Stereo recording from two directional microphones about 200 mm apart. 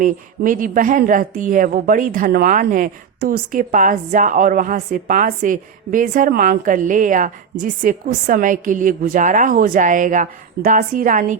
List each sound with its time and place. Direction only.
0.0 s a woman's voice: 40° right (ahead or behind)